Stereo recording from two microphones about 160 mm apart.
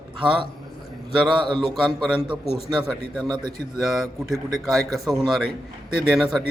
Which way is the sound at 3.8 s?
Centre (ahead or behind).